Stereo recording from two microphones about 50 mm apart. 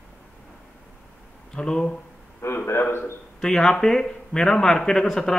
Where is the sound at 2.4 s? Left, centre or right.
Left.